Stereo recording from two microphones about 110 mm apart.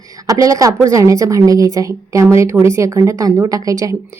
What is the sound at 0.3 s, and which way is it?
A woman's voice, 30° right (ahead or behind).